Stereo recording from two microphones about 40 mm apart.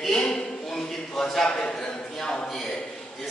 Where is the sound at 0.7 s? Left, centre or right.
Centre.